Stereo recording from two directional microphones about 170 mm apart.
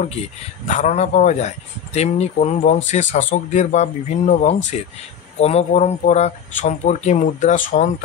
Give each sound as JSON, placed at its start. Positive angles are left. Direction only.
{"t": 0.7, "sound": "speech", "side_deg": 45}